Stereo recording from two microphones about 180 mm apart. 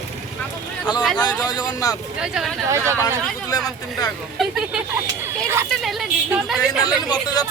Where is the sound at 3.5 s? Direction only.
20° left (ahead or behind).